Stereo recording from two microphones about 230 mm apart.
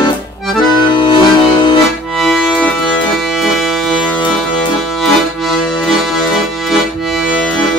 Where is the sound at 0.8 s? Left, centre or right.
Centre.